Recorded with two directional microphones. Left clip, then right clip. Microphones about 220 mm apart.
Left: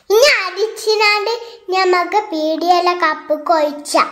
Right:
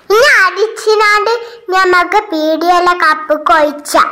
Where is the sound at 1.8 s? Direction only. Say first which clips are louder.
Right 5 dB; 35° right (ahead or behind).